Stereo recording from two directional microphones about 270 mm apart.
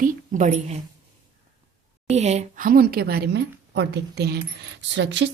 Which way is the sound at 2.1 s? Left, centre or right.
Right.